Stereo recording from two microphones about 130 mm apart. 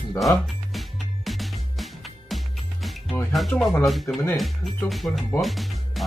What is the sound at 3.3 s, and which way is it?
Speech, centre (ahead or behind).